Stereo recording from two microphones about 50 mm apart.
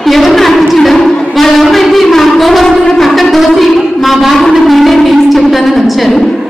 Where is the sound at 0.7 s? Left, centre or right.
Centre.